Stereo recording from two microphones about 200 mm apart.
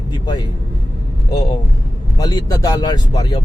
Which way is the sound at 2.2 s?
20° left (ahead or behind).